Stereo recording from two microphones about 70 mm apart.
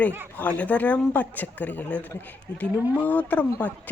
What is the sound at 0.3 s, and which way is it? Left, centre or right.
Speech, left.